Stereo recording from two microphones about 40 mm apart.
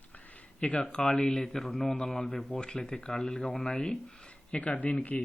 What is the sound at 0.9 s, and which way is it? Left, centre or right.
Speech, centre.